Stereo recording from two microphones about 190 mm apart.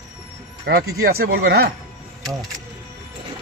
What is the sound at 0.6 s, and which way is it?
Speech, 55° right (ahead or behind).